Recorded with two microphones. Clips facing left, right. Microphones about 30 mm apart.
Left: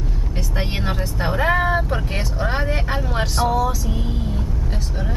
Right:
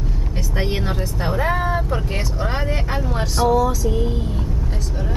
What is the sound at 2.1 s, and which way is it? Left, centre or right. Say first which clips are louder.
A woman's voice: left 1 dB; centre.